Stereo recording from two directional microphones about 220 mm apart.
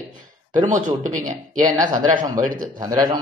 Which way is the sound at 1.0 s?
35° right (ahead or behind).